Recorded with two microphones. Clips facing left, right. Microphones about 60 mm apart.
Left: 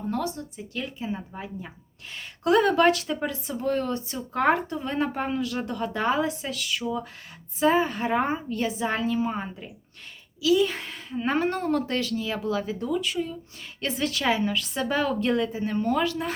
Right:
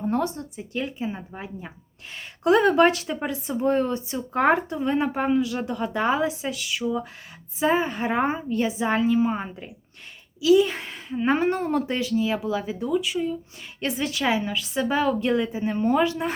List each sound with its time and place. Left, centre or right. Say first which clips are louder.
0.1 s a woman's voice: right 3 dB; right; by 5.8 s centre
5.8 s a woman's voice: right 2 dB; centre
10.4 s a woman's voice: right 4 dB; right; by 15.4 s centre
15.5 s speech: right 3 dB; centre